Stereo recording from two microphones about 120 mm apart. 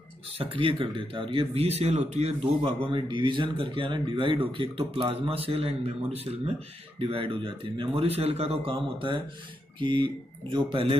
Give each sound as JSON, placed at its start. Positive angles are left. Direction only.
{"t": 0.4, "sound": "speech", "side_deg": -50}
{"t": 2.9, "sound": "speech", "side_deg": -40}